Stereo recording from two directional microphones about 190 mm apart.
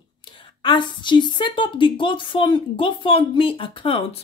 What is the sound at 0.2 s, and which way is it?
Speech, 25° left (ahead or behind).